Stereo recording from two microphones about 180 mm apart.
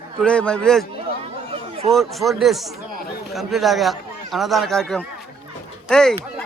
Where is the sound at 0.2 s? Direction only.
5° left (ahead or behind).